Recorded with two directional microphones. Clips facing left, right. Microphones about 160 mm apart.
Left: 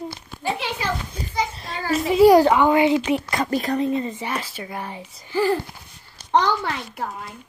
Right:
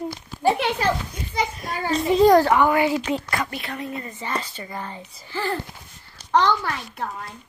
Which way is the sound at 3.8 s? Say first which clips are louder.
Left 9 dB; 25° left (ahead or behind).